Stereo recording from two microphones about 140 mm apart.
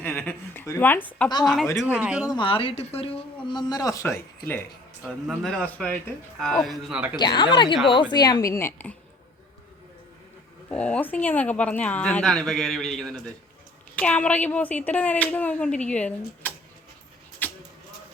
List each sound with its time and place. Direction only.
0.0 s speech: 15° left (ahead or behind)
2.0 s speech: 5° right (ahead or behind)
2.2 s a woman's voice: 35° left (ahead or behind)
3.4 s a woman's voice: 30° left (ahead or behind)
5.0 s speech: centre (ahead or behind)
7.2 s a woman's voice: 35° left (ahead or behind); by 9.0 s 15° left (ahead or behind)
10.7 s speech: 10° left (ahead or behind)
17.4 s a sound: 15° left (ahead or behind)